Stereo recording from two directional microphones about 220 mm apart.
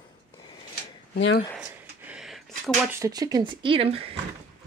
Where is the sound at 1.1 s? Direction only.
55° left (ahead or behind).